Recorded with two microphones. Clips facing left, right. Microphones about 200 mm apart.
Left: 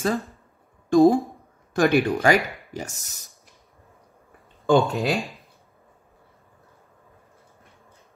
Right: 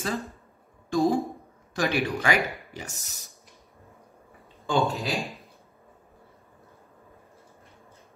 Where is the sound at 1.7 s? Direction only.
50° left (ahead or behind).